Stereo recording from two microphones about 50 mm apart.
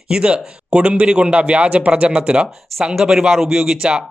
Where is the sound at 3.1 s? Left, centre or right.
Centre.